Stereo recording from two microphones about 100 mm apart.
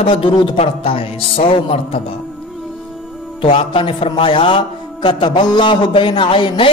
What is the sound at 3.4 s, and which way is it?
Speech, 60° left (ahead or behind).